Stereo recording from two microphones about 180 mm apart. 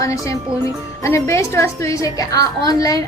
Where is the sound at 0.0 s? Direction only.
15° left (ahead or behind).